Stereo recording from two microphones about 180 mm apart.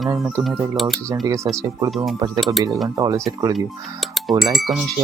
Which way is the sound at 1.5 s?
25° right (ahead or behind).